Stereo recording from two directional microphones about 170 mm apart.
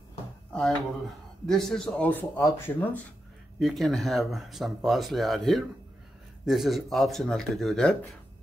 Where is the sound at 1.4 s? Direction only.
5° left (ahead or behind).